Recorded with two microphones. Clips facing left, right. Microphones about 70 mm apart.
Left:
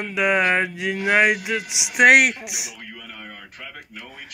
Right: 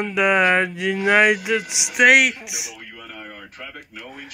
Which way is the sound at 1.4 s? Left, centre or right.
Centre.